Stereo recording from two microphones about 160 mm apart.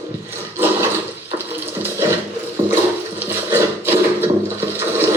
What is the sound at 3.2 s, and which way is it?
Wood, 15° right (ahead or behind).